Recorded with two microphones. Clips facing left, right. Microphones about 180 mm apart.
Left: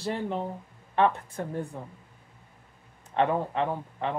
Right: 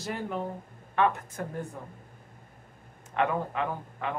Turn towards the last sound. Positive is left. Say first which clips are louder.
# left 3 dB
turn(degrees=30)  # may be behind; listen again after turning